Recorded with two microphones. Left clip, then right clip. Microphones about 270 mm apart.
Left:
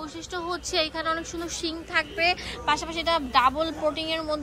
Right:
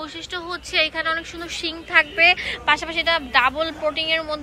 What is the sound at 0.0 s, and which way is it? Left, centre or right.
A woman's voice, centre.